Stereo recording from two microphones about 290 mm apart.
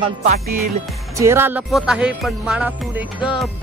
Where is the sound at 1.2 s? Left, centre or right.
Centre.